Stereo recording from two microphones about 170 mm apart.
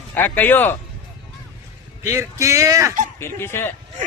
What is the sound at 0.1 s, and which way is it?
Speech, 10° left (ahead or behind).